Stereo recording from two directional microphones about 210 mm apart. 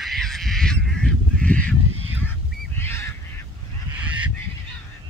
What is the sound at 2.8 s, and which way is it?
Goose, 10° left (ahead or behind).